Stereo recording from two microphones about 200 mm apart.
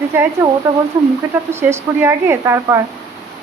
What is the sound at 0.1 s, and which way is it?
Speech, 10° right (ahead or behind).